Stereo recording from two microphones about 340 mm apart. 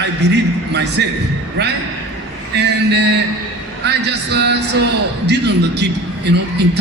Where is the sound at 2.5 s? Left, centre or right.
Right.